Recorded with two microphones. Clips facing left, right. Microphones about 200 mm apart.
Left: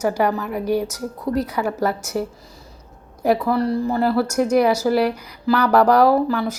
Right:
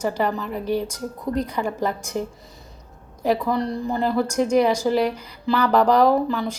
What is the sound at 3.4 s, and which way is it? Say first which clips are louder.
A woman's voice: left 4 dB; 5° left (ahead or behind).